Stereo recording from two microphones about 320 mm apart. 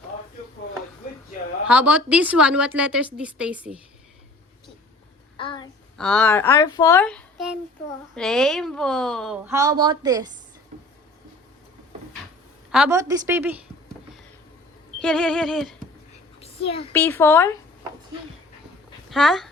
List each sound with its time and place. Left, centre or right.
1.6 s a woman's voice: centre
5.4 s child singing: centre
6.0 s a woman's voice: centre
12.7 s a woman's voice: centre
15.0 s a woman's voice: centre
16.4 s a sound: centre
16.9 s a woman's voice: centre
19.1 s a woman's voice: centre